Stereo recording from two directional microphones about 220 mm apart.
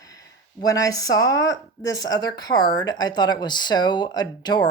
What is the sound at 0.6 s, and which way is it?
Speech, 15° left (ahead or behind).